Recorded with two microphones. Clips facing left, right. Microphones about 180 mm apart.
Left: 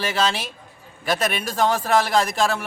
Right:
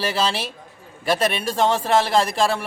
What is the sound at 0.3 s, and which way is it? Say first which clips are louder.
A man's voice: right 1 dB; 35° right (ahead or behind).